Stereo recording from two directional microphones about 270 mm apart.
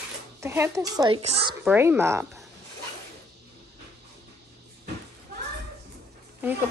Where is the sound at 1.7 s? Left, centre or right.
Centre.